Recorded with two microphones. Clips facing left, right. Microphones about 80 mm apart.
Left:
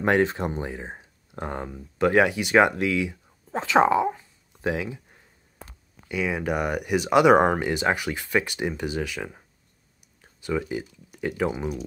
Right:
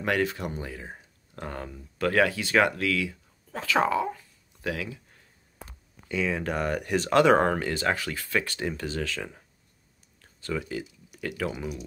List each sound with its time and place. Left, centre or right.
0.0 s speech: left
6.0 s speech: centre
10.2 s a sound: centre
10.7 s speech: left